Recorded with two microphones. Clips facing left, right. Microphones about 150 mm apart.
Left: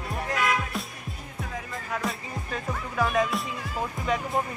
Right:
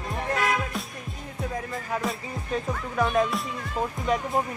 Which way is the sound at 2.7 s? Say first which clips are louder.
Even; centre (ahead or behind).